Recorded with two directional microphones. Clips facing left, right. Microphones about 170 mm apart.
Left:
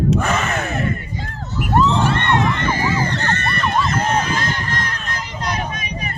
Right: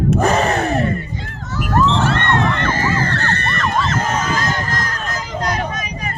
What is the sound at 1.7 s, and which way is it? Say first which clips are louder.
Crowd: even; 15° left (ahead or behind).